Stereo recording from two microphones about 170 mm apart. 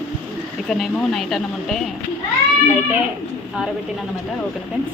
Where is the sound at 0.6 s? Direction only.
Centre (ahead or behind).